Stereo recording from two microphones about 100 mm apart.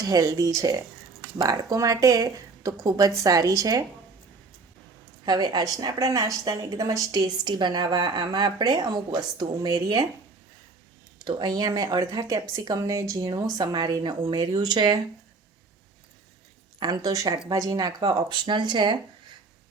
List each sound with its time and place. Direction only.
0.0 s speech: 40° right (ahead or behind)
5.2 s a woman's voice: 45° right (ahead or behind)
11.3 s a woman's voice: 45° right (ahead or behind)
16.8 s speech: 40° right (ahead or behind)
18.0 s a woman's voice: 50° right (ahead or behind)